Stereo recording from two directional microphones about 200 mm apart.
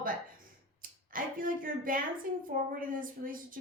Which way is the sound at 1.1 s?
45° right (ahead or behind).